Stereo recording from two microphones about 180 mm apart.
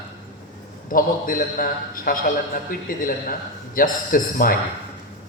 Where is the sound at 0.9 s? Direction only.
50° left (ahead or behind).